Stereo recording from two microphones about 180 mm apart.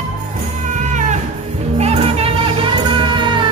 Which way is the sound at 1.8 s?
35° right (ahead or behind).